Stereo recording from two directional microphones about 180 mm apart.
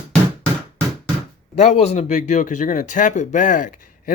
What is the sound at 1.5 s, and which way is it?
Speech, 40° left (ahead or behind).